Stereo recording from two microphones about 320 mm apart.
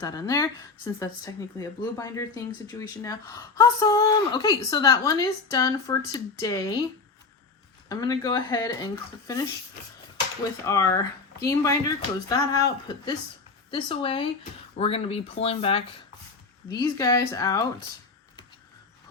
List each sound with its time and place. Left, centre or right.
0.0 s speech: centre
7.9 s speech: centre
10.7 s speech: centre